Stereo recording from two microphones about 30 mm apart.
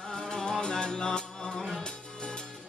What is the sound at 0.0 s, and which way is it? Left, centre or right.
Music, left.